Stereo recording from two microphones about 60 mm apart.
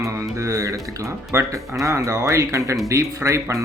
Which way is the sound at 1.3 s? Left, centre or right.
Right.